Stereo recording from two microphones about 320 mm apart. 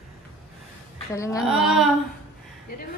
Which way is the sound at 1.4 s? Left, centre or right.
Centre.